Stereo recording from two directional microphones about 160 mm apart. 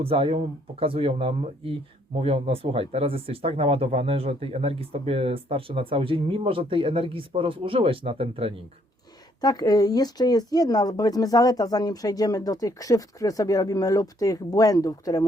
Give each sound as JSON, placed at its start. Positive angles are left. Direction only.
{"t": 0.0, "sound": "speech", "side_deg": -35}
{"t": 9.4, "sound": "speech", "side_deg": 25}